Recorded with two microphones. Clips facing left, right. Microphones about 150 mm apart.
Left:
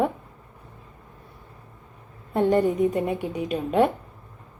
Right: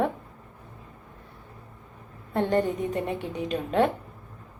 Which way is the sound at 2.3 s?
10° left (ahead or behind).